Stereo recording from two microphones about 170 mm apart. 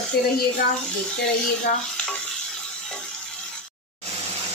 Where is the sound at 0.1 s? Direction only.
65° left (ahead or behind).